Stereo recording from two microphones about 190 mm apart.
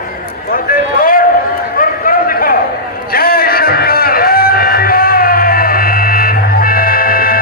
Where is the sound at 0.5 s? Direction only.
50° left (ahead or behind).